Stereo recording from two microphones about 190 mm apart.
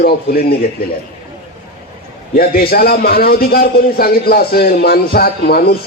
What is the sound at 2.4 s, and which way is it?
A man's voice, 55° left (ahead or behind).